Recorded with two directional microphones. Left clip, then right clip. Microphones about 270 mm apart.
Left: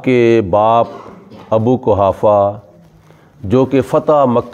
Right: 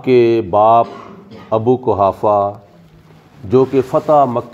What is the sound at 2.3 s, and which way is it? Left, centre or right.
Speech, left.